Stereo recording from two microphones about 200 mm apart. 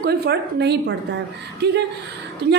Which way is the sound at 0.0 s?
50° right (ahead or behind).